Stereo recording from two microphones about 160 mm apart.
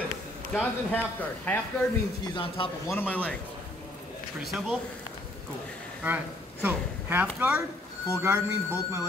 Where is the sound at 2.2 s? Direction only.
30° left (ahead or behind).